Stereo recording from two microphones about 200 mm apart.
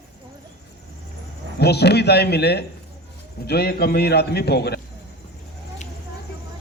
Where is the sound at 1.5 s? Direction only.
55° left (ahead or behind).